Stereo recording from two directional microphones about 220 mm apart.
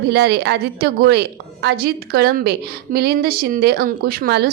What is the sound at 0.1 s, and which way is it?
A woman's voice, 50° right (ahead or behind).